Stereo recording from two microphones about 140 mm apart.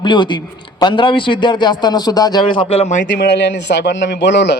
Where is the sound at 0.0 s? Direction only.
35° left (ahead or behind); by 3.1 s 55° left (ahead or behind).